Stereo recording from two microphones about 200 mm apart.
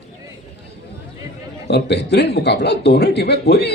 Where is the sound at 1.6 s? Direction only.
55° left (ahead or behind).